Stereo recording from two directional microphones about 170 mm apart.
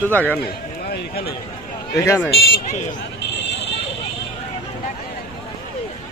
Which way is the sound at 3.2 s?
85° left.